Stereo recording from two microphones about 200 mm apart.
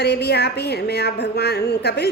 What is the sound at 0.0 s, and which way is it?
A woman's voice, 55° left (ahead or behind).